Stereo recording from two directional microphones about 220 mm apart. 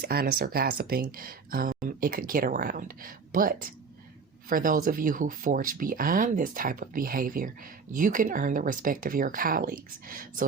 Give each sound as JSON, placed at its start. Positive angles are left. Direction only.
{"t": 0.0, "sound": "speech", "side_deg": -45}